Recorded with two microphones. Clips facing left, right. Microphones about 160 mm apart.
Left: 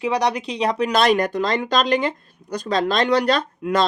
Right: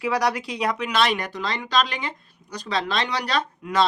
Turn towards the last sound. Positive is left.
turn(degrees=45)  # may be behind; listen again after turning